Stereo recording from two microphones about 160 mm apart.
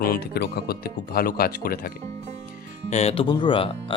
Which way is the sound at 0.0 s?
80° left.